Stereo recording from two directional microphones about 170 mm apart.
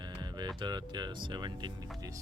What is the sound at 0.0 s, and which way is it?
Speech, 25° right (ahead or behind).